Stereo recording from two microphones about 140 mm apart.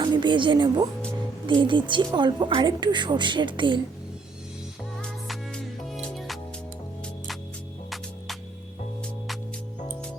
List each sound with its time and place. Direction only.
0.0 s speech: 35° right (ahead or behind)
5.0 s music: 5° left (ahead or behind)